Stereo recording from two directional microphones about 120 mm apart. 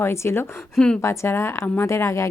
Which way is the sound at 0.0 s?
20° left (ahead or behind).